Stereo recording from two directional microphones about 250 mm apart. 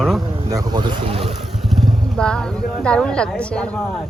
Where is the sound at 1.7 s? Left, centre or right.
Centre.